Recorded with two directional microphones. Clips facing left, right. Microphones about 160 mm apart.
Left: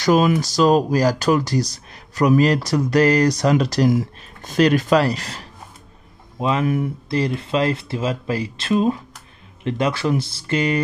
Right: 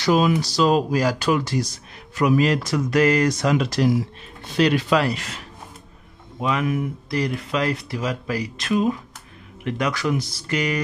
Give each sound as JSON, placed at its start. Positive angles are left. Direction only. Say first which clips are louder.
{"t": 0.0, "sound": "speech", "louder": "left 2 dB", "side_deg": 45}
{"t": 6.4, "sound": "speech", "louder": "left 3 dB", "side_deg": 30}